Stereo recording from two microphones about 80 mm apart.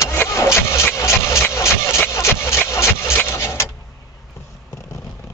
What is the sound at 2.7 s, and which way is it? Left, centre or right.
Rub, left.